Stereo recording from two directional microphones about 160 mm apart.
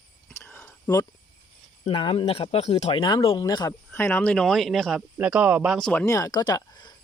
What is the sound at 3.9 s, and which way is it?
Speech, 15° left (ahead or behind).